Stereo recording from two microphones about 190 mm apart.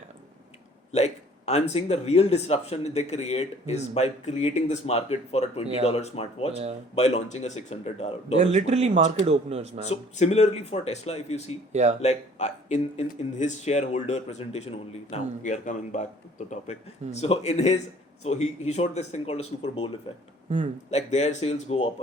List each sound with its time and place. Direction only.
0.9 s speech: 35° left (ahead or behind)
8.4 s a man's voice: 35° right (ahead or behind)
9.9 s speech: 35° left (ahead or behind)
11.7 s a man's voice: 40° right (ahead or behind)
12.0 s speech: 35° left (ahead or behind)
20.9 s speech: 35° left (ahead or behind)